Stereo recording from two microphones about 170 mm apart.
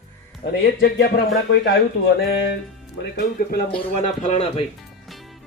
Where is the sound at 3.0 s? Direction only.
70° left (ahead or behind).